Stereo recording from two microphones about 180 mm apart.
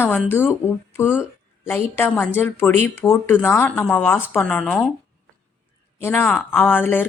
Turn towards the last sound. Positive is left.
turn(degrees=10)  # may be behind; listen again after turning